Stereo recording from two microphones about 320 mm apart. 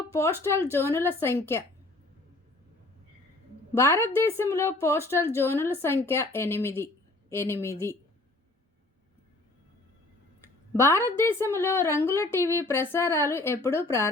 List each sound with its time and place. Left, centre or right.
0.1 s a woman's voice: centre
3.8 s a woman's voice: centre
10.4 s a woman's voice: centre